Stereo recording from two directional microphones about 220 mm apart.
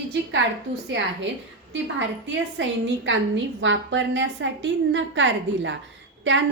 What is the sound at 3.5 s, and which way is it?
A woman's voice, 60° right (ahead or behind).